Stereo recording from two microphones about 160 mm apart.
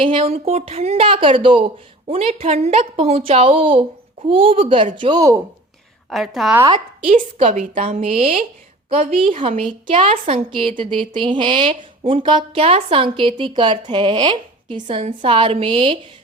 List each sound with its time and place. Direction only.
0.0 s speech: 35° right (ahead or behind)
6.1 s a woman's voice: centre (ahead or behind)
6.7 s a woman's voice: 45° right (ahead or behind)